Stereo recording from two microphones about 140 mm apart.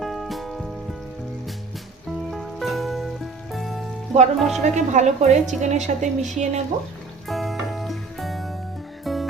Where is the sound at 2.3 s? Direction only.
Centre (ahead or behind).